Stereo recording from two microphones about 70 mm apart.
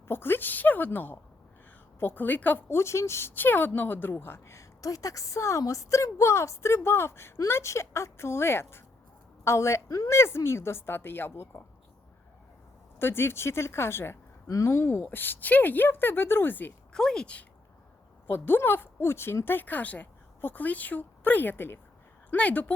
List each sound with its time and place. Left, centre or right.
0.1 s a woman's voice: left
2.7 s a woman's voice: left
13.0 s a woman's voice: left
14.4 s speech: left
15.0 s a woman's voice: left
16.9 s a woman's voice: centre
18.3 s a woman's voice: left